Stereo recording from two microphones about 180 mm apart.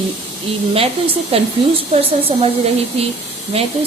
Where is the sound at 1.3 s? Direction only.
30° right (ahead or behind).